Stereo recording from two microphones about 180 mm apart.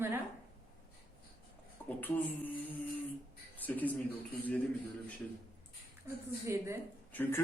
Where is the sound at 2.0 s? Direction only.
10° left (ahead or behind).